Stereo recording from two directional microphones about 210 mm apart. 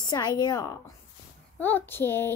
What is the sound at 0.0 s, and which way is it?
A child's voice, 20° left (ahead or behind).